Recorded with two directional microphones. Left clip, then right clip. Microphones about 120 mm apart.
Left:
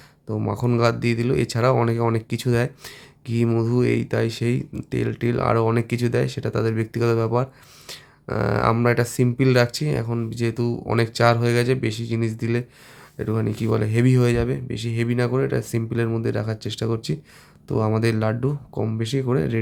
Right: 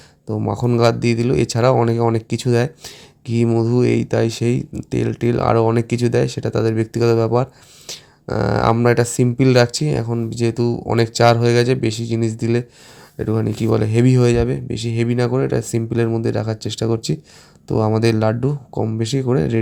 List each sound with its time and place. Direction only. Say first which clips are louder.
0.4 s speech: right 5 dB; 30° right (ahead or behind)
7.9 s a sound: right 4 dB; 30° right (ahead or behind)
8.8 s speech: right 5 dB; 30° right (ahead or behind)